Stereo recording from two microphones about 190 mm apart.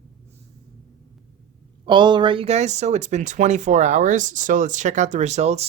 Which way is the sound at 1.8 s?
25° right (ahead or behind).